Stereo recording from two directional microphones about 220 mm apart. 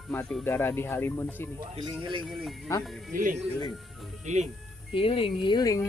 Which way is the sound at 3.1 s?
35° right (ahead or behind).